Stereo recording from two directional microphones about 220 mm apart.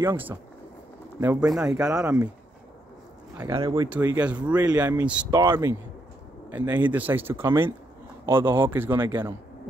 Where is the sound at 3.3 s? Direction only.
15° right (ahead or behind).